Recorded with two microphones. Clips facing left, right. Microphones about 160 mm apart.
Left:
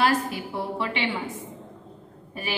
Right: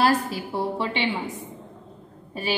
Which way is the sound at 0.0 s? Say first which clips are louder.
Right 2 dB; 30° right (ahead or behind).